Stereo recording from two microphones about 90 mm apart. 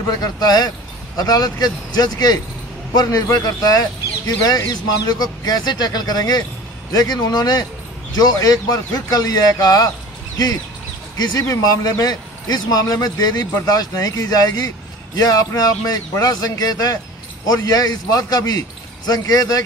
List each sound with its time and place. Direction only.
0.2 s speech: 45° left (ahead or behind)
11.1 s speech: 35° left (ahead or behind)